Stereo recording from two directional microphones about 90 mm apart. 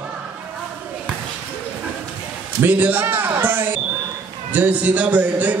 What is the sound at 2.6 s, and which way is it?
A man's voice, 20° right (ahead or behind).